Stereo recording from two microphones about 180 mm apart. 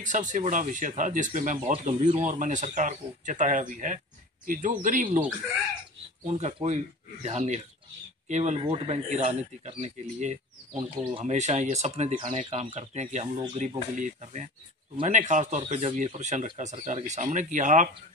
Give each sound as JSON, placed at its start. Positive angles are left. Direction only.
{"t": 0.0, "sound": "speech", "side_deg": -45}
{"t": 1.7, "sound": "speech", "side_deg": -30}
{"t": 2.2, "sound": "speech", "side_deg": -45}
{"t": 6.2, "sound": "speech", "side_deg": -40}